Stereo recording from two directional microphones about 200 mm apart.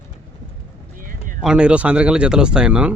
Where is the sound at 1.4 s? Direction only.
5° right (ahead or behind).